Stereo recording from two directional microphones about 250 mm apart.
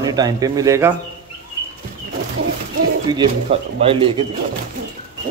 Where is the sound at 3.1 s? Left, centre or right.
Right.